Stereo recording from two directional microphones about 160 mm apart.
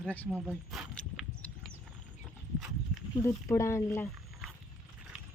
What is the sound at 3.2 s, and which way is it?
Speech, 20° left (ahead or behind).